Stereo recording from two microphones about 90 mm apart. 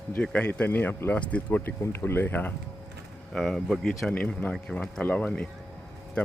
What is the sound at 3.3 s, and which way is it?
Speech, 5° left (ahead or behind).